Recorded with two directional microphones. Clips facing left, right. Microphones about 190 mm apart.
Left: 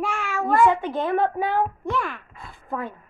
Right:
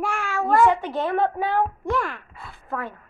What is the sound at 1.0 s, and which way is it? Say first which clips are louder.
Speech: left 1 dB; 15° left (ahead or behind).